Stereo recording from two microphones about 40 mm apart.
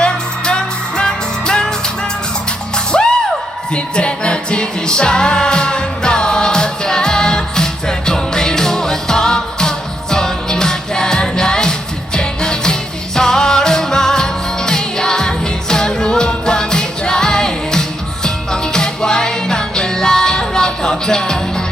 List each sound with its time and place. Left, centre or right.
0.0 s music: left
2.7 s music: centre